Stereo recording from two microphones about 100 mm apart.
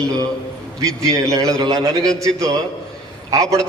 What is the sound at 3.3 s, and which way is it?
Speech, 35° right (ahead or behind).